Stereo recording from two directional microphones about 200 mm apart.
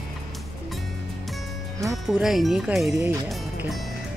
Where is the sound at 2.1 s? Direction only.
Centre (ahead or behind).